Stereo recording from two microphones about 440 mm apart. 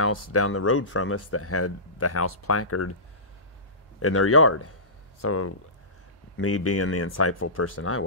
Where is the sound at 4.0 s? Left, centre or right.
Left.